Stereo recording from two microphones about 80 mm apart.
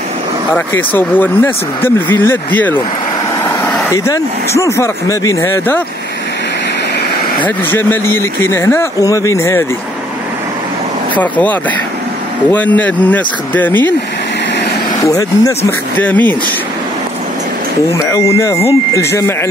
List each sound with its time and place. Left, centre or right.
0.6 s speech: left
3.9 s speech: left
7.4 s speech: left
9.0 s speech: left
11.1 s speech: centre
15.0 s speech: left
16.0 s speech: left
17.9 s speech: left